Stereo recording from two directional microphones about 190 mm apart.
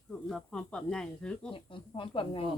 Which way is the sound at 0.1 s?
5° left (ahead or behind).